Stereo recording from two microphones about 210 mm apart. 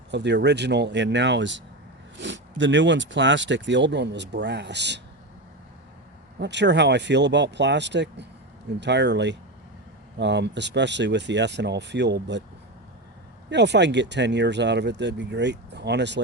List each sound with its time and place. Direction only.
0.1 s speech: 55° right (ahead or behind)
6.4 s speech: 55° right (ahead or behind)
13.5 s speech: 55° right (ahead or behind)